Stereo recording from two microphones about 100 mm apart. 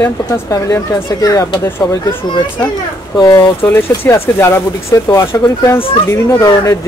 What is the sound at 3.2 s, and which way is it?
Speech, 40° left (ahead or behind).